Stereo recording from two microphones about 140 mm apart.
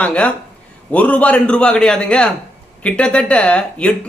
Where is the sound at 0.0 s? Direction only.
10° left (ahead or behind).